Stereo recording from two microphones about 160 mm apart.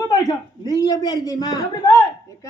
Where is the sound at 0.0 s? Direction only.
25° left (ahead or behind).